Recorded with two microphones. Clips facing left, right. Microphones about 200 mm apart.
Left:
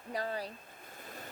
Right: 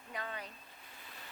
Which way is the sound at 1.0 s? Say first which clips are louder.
Left 9 dB; 45° left (ahead or behind).